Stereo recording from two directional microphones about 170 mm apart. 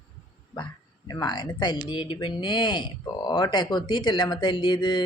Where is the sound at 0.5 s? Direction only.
25° left (ahead or behind).